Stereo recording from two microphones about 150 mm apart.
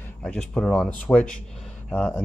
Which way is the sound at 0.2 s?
5° left (ahead or behind).